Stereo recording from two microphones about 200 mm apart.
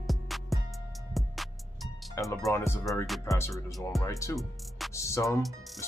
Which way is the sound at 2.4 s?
15° left (ahead or behind).